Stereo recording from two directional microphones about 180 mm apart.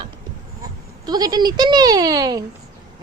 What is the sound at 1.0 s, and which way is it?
A woman's voice, 20° right (ahead or behind).